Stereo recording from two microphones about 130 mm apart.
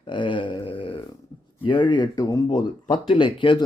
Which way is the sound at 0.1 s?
40° left (ahead or behind).